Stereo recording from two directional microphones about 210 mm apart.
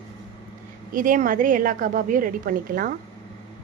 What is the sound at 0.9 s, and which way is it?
A woman's voice, 40° right (ahead or behind).